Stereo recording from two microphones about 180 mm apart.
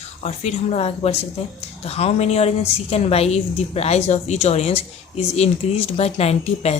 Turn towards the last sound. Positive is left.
turn(degrees=35)  # may be behind; listen again after turning